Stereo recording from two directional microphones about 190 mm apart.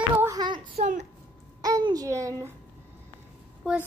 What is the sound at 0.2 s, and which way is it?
Child singing, 20° right (ahead or behind).